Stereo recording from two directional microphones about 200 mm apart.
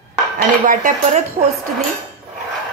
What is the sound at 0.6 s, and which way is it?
Speech, 40° right (ahead or behind).